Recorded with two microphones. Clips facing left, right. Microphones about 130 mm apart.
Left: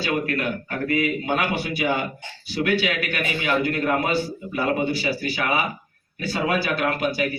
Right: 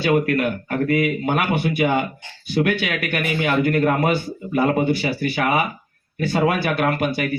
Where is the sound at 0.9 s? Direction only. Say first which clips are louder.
Right 2 dB; 55° right (ahead or behind).